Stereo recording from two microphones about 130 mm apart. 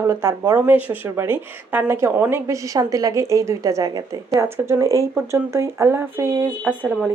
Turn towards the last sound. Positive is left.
turn(degrees=-10)  # may be behind; listen again after turning